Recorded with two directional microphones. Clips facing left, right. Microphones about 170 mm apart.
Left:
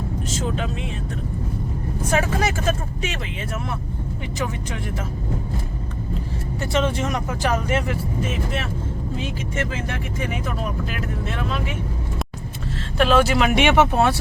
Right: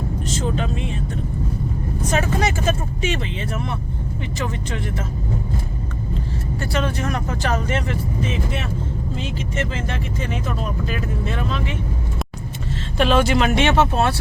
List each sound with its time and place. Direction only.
0.3 s speech: 5° left (ahead or behind)
2.0 s speech: 5° left (ahead or behind)
6.6 s speech: 25° left (ahead or behind)
7.3 s speech: 10° left (ahead or behind)
10.8 s speech: centre (ahead or behind)
13.0 s speech: centre (ahead or behind)